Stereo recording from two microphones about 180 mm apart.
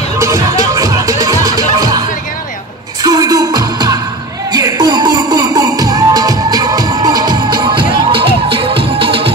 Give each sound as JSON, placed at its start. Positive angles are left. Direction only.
{"t": 0.2, "sound": "music", "side_deg": -20}